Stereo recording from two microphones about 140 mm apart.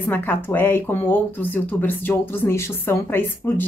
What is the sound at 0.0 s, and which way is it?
Speech, 15° left (ahead or behind).